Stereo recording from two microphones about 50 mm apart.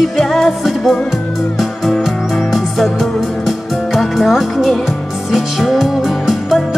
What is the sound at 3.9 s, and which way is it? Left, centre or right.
Music, centre.